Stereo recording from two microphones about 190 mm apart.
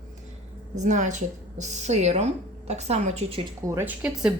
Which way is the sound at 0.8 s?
40° right (ahead or behind).